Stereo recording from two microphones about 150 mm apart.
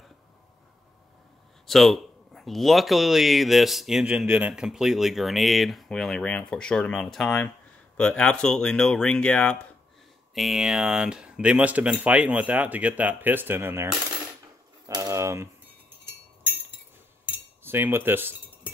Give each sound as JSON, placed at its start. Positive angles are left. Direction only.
{"t": 1.7, "sound": "speech", "side_deg": 0}
{"t": 14.9, "sound": "typewriter", "side_deg": -20}
{"t": 17.6, "sound": "speech", "side_deg": -15}